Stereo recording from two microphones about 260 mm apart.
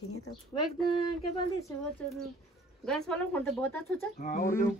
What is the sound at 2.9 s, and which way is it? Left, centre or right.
Speech, centre.